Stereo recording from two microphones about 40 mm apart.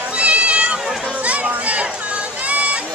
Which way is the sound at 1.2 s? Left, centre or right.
Right.